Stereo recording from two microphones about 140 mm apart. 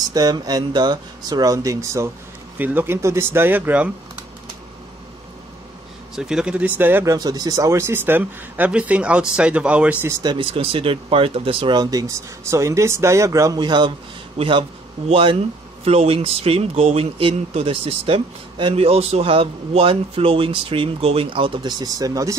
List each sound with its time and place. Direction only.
0.1 s speech: 30° right (ahead or behind); by 3.9 s 10° right (ahead or behind)
6.1 s speech: 5° right (ahead or behind)
7.2 s speech: 25° right (ahead or behind); by 9.9 s 10° right (ahead or behind)
10.2 s speech: 40° right (ahead or behind)
14.4 s speech: 45° right (ahead or behind); by 22.3 s 25° right (ahead or behind)